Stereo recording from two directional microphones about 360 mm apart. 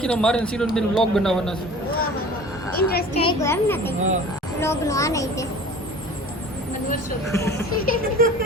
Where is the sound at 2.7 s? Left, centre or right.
Left.